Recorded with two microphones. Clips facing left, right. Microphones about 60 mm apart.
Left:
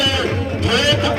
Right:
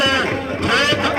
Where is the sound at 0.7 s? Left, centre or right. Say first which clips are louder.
Even; right.